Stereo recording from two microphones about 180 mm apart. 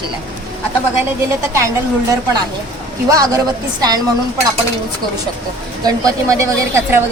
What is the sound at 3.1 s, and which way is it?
Speech, 20° right (ahead or behind).